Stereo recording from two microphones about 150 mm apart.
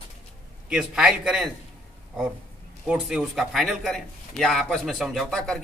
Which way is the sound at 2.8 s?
Centre (ahead or behind).